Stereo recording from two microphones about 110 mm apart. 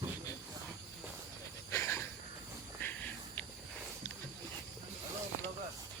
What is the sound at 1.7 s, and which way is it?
Cricket, 25° left (ahead or behind).